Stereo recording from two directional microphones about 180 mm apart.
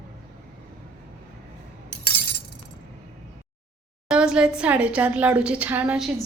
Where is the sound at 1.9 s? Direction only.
60° right (ahead or behind).